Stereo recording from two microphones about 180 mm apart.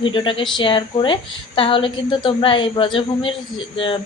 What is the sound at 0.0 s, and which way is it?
A woman's voice, 25° left (ahead or behind).